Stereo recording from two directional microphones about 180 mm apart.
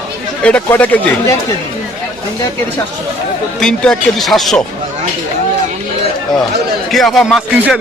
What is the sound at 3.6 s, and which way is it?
Speech, 5° left (ahead or behind).